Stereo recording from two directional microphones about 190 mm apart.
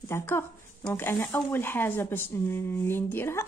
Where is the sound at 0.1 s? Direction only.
15° left (ahead or behind).